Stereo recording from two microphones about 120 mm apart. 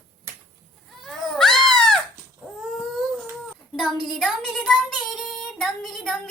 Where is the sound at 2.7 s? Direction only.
5° left (ahead or behind).